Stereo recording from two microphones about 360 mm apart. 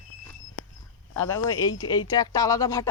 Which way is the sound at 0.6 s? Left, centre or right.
Left.